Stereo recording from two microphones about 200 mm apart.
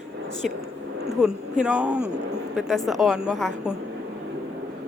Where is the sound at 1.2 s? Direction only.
5° right (ahead or behind).